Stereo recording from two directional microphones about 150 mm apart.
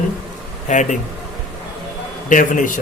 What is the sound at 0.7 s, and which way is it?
Speech, 55° left (ahead or behind).